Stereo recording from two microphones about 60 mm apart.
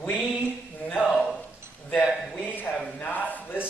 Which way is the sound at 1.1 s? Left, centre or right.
Centre.